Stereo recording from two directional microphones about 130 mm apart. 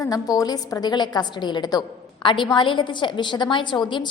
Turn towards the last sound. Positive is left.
turn(degrees=35)  # may be behind; listen again after turning